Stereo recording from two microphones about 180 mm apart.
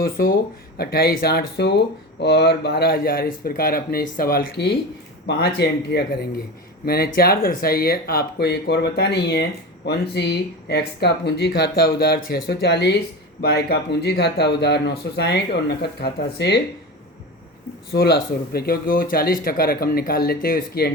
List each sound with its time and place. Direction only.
0.0 s speech: 55° left (ahead or behind)
17.9 s speech: 60° left (ahead or behind)